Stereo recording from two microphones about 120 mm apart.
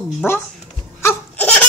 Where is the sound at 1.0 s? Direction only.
15° left (ahead or behind).